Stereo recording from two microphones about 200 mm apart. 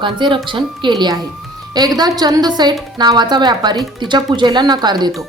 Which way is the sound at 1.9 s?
20° right (ahead or behind).